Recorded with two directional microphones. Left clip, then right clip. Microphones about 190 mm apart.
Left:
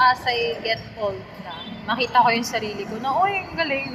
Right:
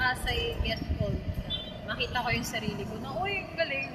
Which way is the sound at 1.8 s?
20° right (ahead or behind).